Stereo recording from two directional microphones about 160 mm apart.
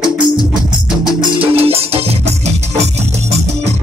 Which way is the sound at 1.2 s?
35° right (ahead or behind).